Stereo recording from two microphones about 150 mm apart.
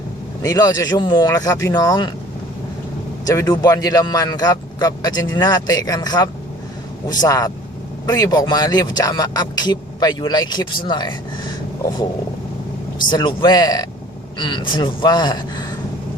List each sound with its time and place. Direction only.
0.4 s speech: 25° left (ahead or behind)
3.2 s speech: 25° left (ahead or behind)
13.1 s speech: 30° left (ahead or behind)